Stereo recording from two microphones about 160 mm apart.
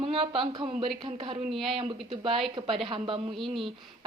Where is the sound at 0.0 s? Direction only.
35° right (ahead or behind).